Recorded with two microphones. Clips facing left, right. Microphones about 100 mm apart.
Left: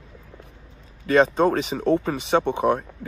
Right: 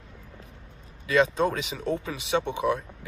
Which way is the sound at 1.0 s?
45° left (ahead or behind).